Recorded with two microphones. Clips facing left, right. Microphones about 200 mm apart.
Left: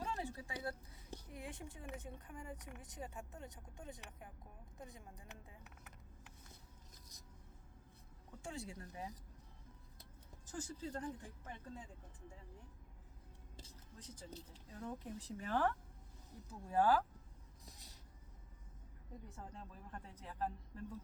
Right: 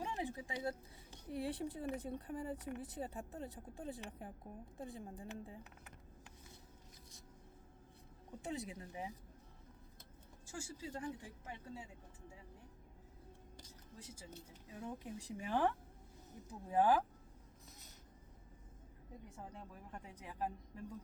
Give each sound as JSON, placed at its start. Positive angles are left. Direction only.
{"t": 0.0, "sound": "speech", "side_deg": -15}
{"t": 1.3, "sound": "speech", "side_deg": -35}
{"t": 8.3, "sound": "speech", "side_deg": -20}
{"t": 10.4, "sound": "speech", "side_deg": -10}
{"t": 14.0, "sound": "speech", "side_deg": -10}
{"t": 17.7, "sound": "a sound", "side_deg": 35}
{"t": 19.5, "sound": "speech", "side_deg": -15}